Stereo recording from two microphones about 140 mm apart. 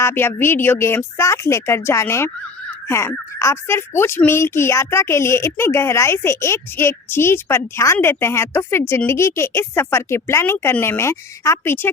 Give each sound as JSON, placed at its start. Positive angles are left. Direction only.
{"t": 0.0, "sound": "speech", "side_deg": 15}